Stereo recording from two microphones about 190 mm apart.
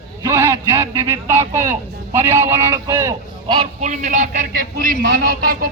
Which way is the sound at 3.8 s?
40° right (ahead or behind).